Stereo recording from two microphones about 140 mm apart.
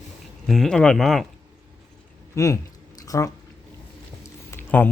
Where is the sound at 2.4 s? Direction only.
20° left (ahead or behind).